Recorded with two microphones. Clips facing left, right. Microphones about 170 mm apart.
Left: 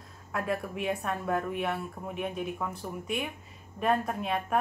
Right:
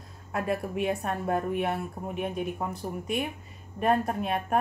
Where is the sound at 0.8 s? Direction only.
40° right (ahead or behind).